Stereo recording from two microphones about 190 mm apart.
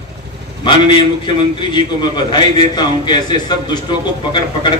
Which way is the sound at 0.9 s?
25° left (ahead or behind).